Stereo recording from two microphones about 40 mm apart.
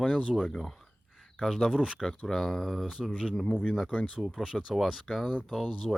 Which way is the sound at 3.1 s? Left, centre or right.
Centre.